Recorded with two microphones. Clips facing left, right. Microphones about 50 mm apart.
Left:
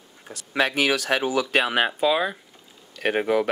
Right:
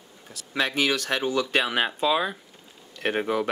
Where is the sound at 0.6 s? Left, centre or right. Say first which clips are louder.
Left 3 dB; centre.